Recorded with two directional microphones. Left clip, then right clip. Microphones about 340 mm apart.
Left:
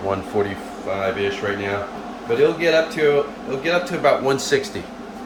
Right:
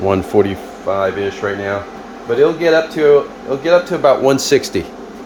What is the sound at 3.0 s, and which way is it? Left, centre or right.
Speech, centre.